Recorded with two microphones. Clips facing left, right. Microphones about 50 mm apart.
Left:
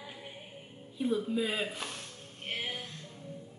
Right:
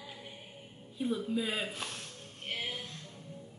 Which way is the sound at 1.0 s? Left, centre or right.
Centre.